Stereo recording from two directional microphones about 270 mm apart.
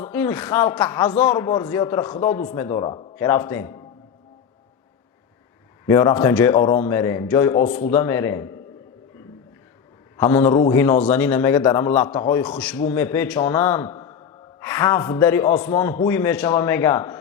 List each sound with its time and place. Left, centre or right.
0.0 s a man's voice: centre
5.8 s a man's voice: centre
7.7 s speech: left
7.9 s a man's voice: centre
10.2 s a man's voice: centre